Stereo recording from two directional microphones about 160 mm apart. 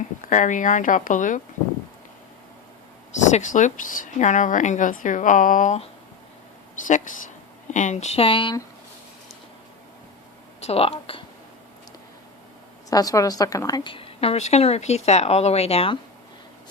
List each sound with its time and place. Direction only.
0.3 s speech: 55° left (ahead or behind)
3.2 s speech: 50° left (ahead or behind); by 8.5 s 30° left (ahead or behind)
10.6 s speech: 40° left (ahead or behind)
12.9 s a woman's voice: 20° left (ahead or behind); by 16.0 s 40° left (ahead or behind)